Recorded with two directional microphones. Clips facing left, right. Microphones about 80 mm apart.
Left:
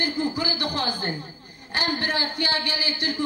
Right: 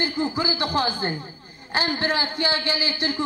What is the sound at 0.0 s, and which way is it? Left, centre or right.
A woman's voice, right.